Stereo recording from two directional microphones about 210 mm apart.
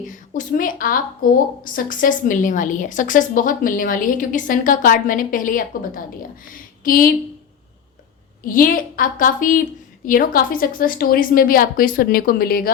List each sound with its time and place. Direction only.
0.1 s a woman's voice: 40° left (ahead or behind)
8.4 s a woman's voice: 40° left (ahead or behind)